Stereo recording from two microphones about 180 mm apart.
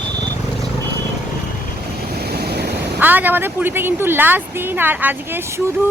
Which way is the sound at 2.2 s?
60° right (ahead or behind).